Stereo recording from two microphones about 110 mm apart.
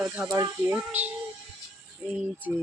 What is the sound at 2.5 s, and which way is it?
Speech, 15° right (ahead or behind).